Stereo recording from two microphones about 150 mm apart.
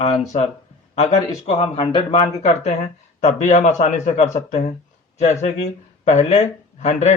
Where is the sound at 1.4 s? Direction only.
40° left (ahead or behind).